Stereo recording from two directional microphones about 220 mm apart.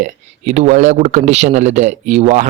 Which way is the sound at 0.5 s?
35° right (ahead or behind).